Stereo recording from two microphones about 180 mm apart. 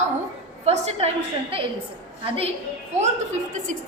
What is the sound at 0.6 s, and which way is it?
A woman's voice, 35° right (ahead or behind).